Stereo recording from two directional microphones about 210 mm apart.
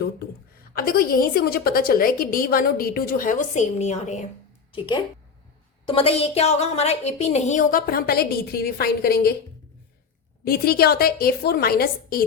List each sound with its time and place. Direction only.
0.7 s a woman's voice: 45° left (ahead or behind)
4.7 s a woman's voice: 20° left (ahead or behind); by 9.3 s 50° left (ahead or behind)
10.4 s a woman's voice: 45° left (ahead or behind)